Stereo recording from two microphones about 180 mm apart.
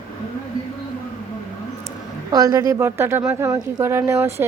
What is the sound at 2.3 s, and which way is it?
A woman's voice, 20° right (ahead or behind).